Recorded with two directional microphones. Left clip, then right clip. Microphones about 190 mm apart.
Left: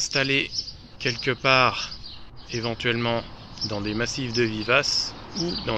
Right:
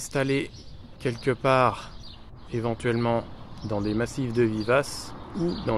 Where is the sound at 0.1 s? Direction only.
30° right (ahead or behind).